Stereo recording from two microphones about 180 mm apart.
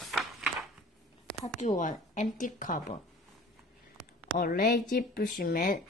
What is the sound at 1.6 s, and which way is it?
Speech, 45° left (ahead or behind).